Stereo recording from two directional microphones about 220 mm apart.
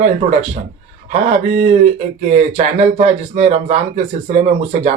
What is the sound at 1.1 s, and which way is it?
Speech, 30° right (ahead or behind).